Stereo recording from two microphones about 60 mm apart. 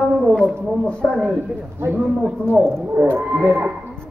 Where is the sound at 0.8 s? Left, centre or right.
Centre.